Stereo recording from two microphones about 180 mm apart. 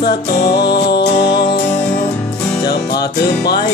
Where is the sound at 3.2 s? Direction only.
65° left (ahead or behind).